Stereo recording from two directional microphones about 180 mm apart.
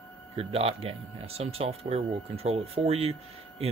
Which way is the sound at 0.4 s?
35° right (ahead or behind).